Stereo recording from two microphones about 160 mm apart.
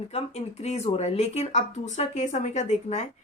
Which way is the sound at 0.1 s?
40° left (ahead or behind).